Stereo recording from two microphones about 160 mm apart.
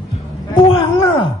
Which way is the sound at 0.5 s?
30° left (ahead or behind).